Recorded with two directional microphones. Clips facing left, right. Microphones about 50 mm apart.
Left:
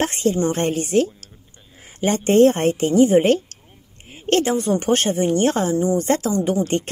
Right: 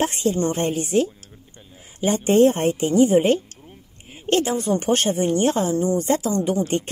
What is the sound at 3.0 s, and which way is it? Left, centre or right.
Speech, left.